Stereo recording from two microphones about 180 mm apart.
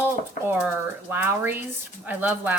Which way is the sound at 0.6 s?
10° right (ahead or behind).